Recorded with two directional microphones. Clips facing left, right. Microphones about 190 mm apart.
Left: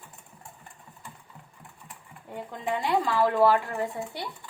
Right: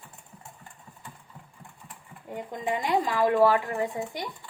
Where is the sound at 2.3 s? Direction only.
15° right (ahead or behind).